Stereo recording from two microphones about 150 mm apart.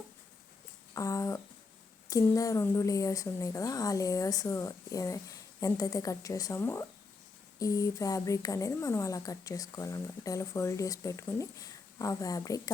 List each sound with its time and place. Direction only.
0.9 s a woman's voice: 20° left (ahead or behind)